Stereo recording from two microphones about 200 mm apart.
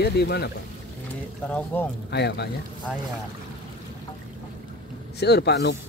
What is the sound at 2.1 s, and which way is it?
Speech, 55° left (ahead or behind).